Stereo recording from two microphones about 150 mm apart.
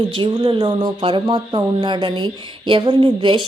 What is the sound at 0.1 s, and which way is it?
Speech, 35° right (ahead or behind).